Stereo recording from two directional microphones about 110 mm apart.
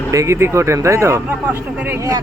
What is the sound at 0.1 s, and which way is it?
Speech, 30° right (ahead or behind).